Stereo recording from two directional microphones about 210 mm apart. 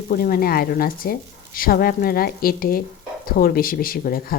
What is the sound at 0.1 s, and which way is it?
A woman's voice, 45° left (ahead or behind).